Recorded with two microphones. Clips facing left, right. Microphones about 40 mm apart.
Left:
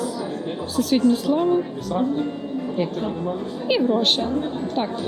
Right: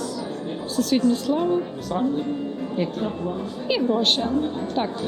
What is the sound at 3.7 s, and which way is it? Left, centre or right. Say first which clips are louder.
Speech: left 2 dB; centre.